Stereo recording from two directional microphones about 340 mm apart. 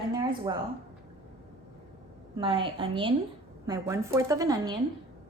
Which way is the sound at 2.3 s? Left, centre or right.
Centre.